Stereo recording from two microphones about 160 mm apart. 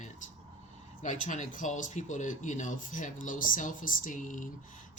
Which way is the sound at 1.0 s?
50° left (ahead or behind).